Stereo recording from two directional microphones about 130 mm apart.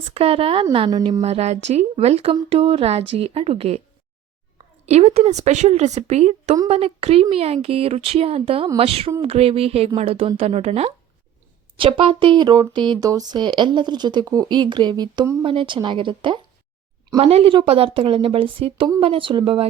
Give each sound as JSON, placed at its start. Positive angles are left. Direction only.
{"t": 0.0, "sound": "a woman's voice", "side_deg": -50}
{"t": 0.9, "sound": "speech", "side_deg": -30}
{"t": 1.2, "sound": "a woman's voice", "side_deg": -55}
{"t": 4.9, "sound": "a woman's voice", "side_deg": -55}
{"t": 11.8, "sound": "speech", "side_deg": -45}
{"t": 15.4, "sound": "speech", "side_deg": -40}
{"t": 17.2, "sound": "a woman's voice", "side_deg": -50}